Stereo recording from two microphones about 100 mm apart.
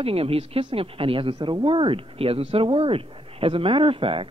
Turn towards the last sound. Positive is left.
turn(degrees=-65)  # may be behind; listen again after turning